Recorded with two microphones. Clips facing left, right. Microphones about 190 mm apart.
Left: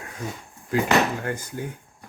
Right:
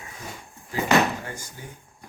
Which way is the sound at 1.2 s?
60° left (ahead or behind).